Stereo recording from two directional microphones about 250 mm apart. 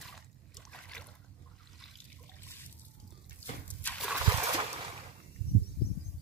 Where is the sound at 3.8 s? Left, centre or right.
Centre.